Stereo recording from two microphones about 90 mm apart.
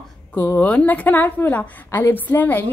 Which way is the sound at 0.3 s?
15° left (ahead or behind).